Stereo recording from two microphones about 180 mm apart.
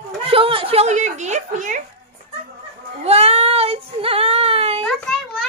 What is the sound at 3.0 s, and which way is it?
Child singing, 35° right (ahead or behind).